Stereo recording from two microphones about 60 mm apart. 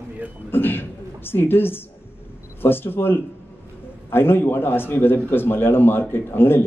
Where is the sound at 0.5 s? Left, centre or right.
Left.